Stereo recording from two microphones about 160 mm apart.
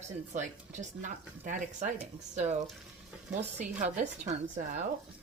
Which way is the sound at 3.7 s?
50° right (ahead or behind).